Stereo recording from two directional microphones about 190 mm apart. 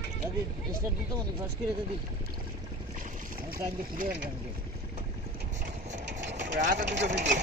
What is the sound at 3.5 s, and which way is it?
Speech, 50° right (ahead or behind).